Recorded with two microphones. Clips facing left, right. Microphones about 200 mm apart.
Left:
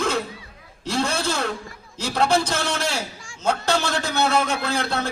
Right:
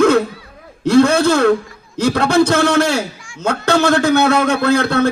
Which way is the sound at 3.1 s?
40° left (ahead or behind).